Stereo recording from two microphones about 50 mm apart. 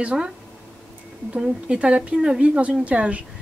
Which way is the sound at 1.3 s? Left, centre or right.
Right.